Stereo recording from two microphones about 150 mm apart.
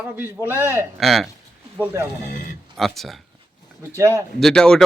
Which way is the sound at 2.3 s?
75° left (ahead or behind).